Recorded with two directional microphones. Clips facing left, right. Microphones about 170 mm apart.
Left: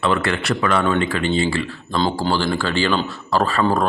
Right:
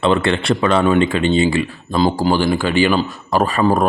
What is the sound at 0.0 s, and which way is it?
Speech, 25° right (ahead or behind).